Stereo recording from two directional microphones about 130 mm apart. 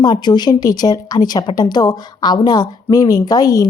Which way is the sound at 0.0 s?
35° left (ahead or behind).